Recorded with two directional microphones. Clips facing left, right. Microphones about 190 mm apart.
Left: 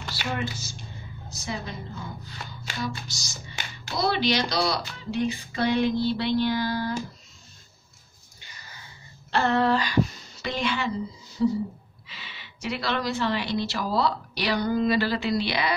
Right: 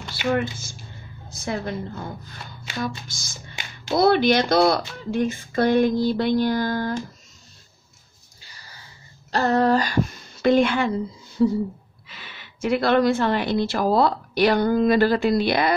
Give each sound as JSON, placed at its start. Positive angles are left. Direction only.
{"t": 0.1, "sound": "a woman's voice", "side_deg": -55}
{"t": 9.3, "sound": "a woman's voice", "side_deg": -40}
{"t": 12.1, "sound": "a woman's voice", "side_deg": -50}